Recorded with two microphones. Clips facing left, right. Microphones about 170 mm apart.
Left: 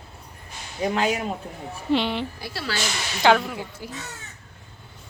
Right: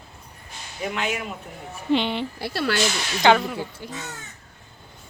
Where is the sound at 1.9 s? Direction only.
Centre (ahead or behind).